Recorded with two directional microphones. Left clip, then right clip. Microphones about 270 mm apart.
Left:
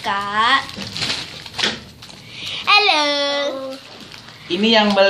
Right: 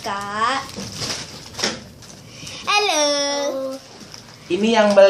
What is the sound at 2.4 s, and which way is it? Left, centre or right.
Babbling, centre.